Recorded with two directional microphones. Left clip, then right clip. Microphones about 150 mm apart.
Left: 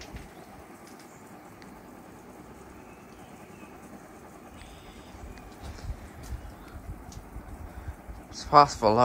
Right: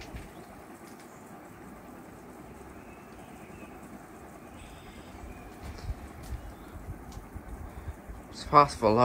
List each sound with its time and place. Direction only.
8.4 s speech: 10° left (ahead or behind)